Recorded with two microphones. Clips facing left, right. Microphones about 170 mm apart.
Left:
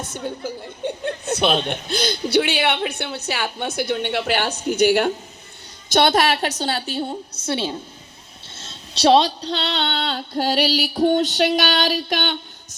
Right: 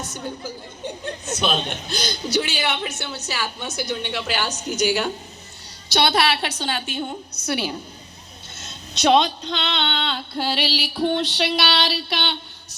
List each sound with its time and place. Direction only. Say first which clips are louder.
0.0 s a woman's voice: left 3 dB; 55° left (ahead or behind); by 7.8 s 25° left (ahead or behind)
8.5 s female singing: even; 30° left (ahead or behind); by 12.4 s 45° left (ahead or behind)